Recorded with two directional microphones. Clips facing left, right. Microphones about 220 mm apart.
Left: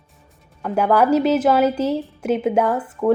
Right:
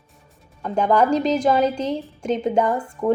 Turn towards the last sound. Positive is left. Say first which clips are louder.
# left 3 dB
turn(degrees=-15)  # may be behind; listen again after turning